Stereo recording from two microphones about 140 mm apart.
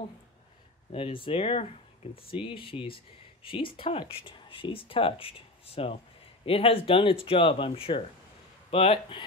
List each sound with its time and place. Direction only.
0.9 s speech: 40° left (ahead or behind)